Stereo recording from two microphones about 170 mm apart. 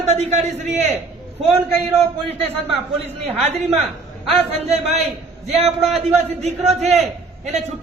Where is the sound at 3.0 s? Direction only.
40° right (ahead or behind).